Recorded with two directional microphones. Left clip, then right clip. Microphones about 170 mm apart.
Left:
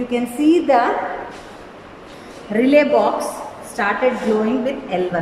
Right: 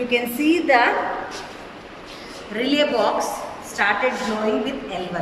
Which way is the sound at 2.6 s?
55° left (ahead or behind).